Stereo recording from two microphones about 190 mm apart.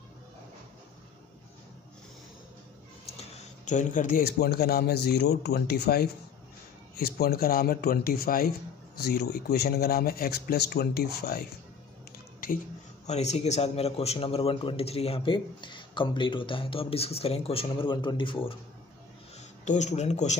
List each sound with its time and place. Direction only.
3.3 s a man's voice: 40° left (ahead or behind)
13.0 s a man's voice: 35° left (ahead or behind)
19.6 s speech: 40° left (ahead or behind)